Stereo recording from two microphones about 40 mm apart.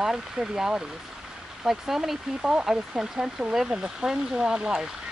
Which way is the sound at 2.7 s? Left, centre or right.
Centre.